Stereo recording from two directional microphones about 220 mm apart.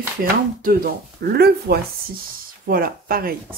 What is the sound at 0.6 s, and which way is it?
Speech, 40° right (ahead or behind).